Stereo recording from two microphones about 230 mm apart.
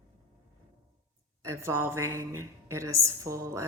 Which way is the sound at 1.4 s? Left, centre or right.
Centre.